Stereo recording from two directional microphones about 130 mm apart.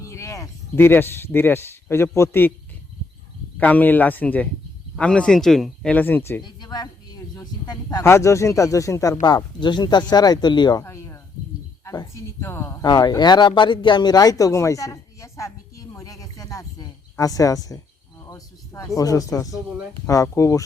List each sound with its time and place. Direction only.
0.1 s speech: 25° left (ahead or behind)
3.6 s speech: 10° left (ahead or behind)
6.4 s speech: 35° left (ahead or behind)
10.8 s a sound: 20° left (ahead or behind)
11.9 s speech: 25° left (ahead or behind)
12.8 s speech: 30° left (ahead or behind)